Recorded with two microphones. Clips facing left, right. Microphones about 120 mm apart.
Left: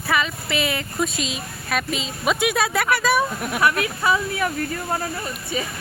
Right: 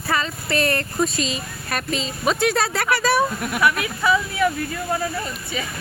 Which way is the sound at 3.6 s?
35° left (ahead or behind).